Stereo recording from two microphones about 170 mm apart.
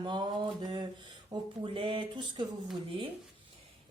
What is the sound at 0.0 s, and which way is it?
A woman's voice, 25° right (ahead or behind).